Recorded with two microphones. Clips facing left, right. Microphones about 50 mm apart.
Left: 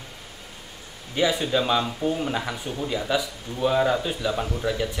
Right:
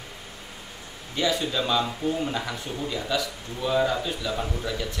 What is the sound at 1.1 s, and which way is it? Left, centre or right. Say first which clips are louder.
A man's voice: left 3 dB; centre.